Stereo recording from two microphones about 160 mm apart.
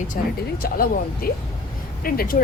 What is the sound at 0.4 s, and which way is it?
A woman's voice, 70° left (ahead or behind).